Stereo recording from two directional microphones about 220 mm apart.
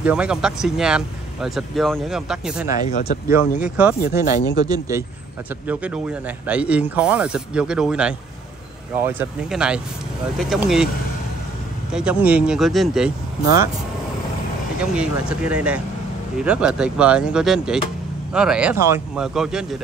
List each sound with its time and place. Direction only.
0.0 s speech: 5° right (ahead or behind)
2.6 s speech: 40° left (ahead or behind)
3.5 s speech: 5° right (ahead or behind)
4.0 s speech: 40° left (ahead or behind)
4.6 s a man's voice: 15° right (ahead or behind)
11.9 s speech: 5° right (ahead or behind)
14.8 s speech: 5° right (ahead or behind)